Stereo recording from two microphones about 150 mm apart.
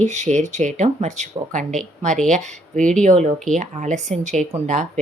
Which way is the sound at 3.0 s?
50° right (ahead or behind).